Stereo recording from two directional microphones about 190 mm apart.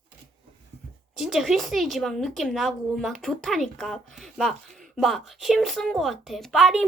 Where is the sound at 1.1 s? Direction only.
Centre (ahead or behind).